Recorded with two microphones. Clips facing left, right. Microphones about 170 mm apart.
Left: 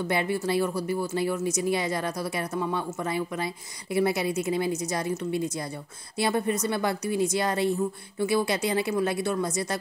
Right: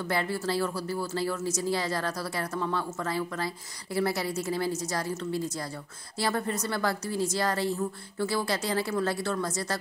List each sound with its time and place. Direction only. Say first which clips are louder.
0.0 s a woman's voice: left 3 dB; 20° left (ahead or behind)